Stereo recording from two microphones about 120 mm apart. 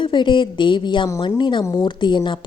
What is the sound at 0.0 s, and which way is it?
Speech, 40° left (ahead or behind).